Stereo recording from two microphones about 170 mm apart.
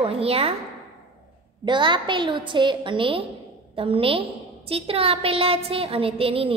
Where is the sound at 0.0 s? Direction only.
35° right (ahead or behind).